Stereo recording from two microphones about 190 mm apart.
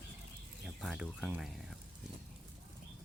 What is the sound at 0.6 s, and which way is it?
Speech, centre (ahead or behind).